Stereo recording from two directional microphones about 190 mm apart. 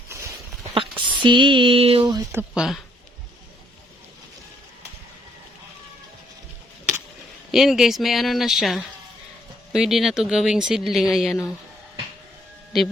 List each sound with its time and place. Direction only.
0.7 s speech: 25° right (ahead or behind)
2.3 s speech: 5° right (ahead or behind)
7.5 s speech: centre (ahead or behind)